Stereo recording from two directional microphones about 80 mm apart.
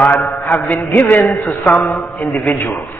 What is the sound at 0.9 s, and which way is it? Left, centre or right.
Speech, left.